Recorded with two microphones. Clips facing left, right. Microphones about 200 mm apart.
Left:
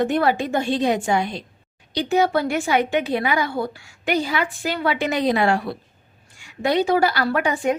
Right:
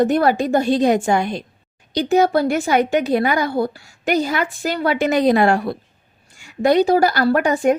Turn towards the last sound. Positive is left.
turn(degrees=-45)  # may be behind; listen again after turning